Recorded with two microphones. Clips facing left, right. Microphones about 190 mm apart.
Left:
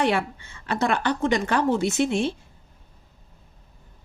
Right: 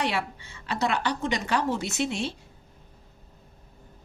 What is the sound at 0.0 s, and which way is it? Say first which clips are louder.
A woman's voice: left 6 dB; 50° left (ahead or behind).